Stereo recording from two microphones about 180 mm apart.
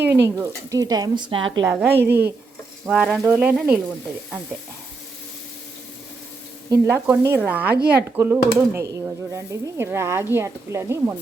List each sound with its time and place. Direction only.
0.0 s speech: 15° right (ahead or behind)
1.6 s speech: 10° right (ahead or behind)
6.7 s speech: 15° right (ahead or behind)